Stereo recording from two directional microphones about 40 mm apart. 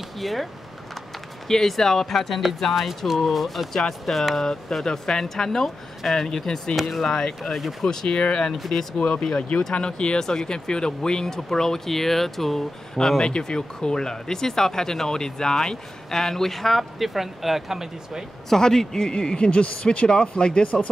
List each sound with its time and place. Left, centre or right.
0.2 s speech: centre
1.5 s speech: centre
6.7 s speech: centre
8.2 s speech: left
8.5 s speech: centre
8.9 s speech: centre
13.2 s speech: centre
18.5 s speech: centre